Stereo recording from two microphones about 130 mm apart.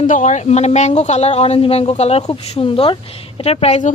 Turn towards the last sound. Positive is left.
turn(degrees=60)  # may be behind; listen again after turning